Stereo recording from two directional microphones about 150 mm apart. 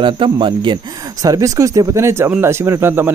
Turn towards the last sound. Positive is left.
turn(degrees=-15)  # may be behind; listen again after turning